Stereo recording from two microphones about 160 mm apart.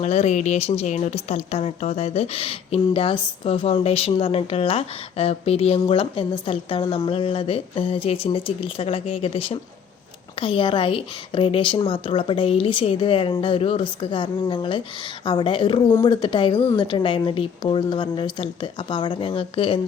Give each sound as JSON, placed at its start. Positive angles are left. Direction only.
{"t": 0.0, "sound": "a woman's voice", "side_deg": 45}